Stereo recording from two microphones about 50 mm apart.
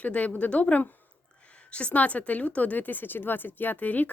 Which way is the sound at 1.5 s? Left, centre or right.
Left.